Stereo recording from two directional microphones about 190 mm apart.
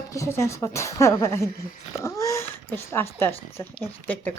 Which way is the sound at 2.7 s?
10° left (ahead or behind).